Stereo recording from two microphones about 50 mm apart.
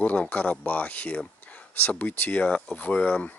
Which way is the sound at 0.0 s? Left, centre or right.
Left.